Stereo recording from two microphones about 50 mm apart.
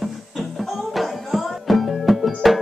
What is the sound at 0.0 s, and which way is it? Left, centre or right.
Music, centre.